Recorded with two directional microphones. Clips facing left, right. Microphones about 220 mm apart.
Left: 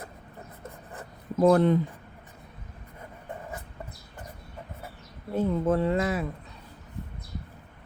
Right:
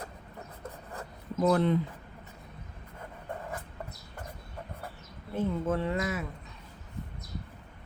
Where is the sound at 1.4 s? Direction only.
45° left (ahead or behind).